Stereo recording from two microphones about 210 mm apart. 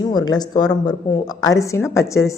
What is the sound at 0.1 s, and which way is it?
Speech, 20° left (ahead or behind).